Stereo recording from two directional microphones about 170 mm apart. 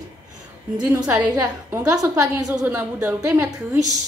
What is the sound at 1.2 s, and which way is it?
A woman's voice, 25° right (ahead or behind).